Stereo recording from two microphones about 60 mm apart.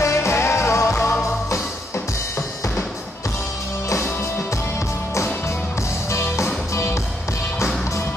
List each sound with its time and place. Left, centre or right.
0.0 s music: left
6.0 s music: left